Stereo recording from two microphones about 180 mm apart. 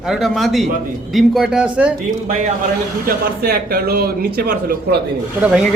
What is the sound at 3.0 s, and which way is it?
Speech, 55° right (ahead or behind).